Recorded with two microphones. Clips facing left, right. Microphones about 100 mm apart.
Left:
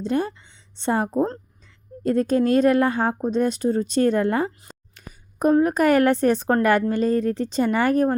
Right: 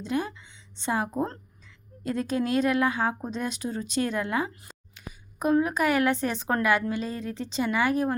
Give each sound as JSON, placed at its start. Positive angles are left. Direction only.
{"t": 0.0, "sound": "a woman's voice", "side_deg": 40}